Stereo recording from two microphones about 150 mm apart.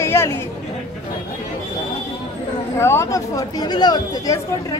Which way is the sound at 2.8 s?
20° left (ahead or behind).